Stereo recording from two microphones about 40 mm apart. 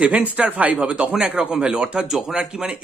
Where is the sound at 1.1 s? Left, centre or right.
Centre.